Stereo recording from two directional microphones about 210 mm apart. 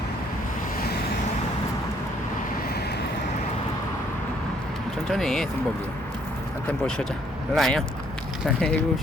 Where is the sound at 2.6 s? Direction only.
50° left (ahead or behind).